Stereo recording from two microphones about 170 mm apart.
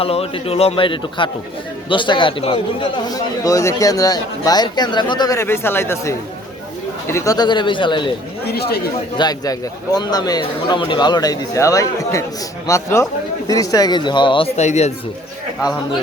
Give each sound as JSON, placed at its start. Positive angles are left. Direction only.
{"t": 0.0, "sound": "speech", "side_deg": 35}
{"t": 8.4, "sound": "speech", "side_deg": 70}
{"t": 9.1, "sound": "a man's voice", "side_deg": 25}